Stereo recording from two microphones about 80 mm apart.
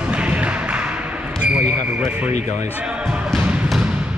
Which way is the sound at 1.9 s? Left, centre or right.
Centre.